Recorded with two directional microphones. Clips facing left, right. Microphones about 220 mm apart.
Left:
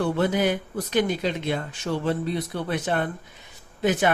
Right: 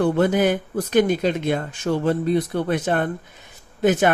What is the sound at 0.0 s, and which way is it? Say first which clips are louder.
Speech: right 5 dB; 50° right (ahead or behind).